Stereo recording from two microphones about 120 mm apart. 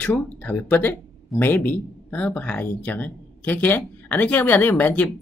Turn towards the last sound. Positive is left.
turn(degrees=15)  # may be behind; listen again after turning